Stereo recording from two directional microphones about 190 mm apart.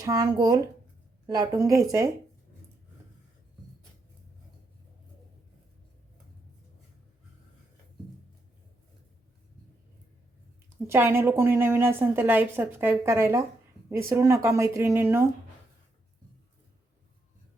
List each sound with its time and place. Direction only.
0.0 s a woman's voice: 20° right (ahead or behind)
10.8 s a woman's voice: 15° right (ahead or behind)